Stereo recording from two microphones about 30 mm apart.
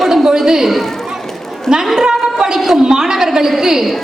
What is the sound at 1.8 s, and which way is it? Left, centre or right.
A woman's voice, centre.